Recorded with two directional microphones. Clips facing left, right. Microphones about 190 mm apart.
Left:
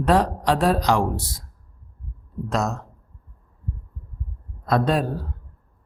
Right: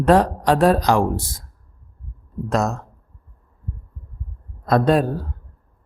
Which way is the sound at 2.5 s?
50° right (ahead or behind).